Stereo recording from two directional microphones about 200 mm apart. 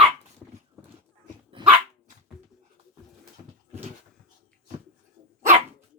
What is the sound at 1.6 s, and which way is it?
Dog, 25° right (ahead or behind).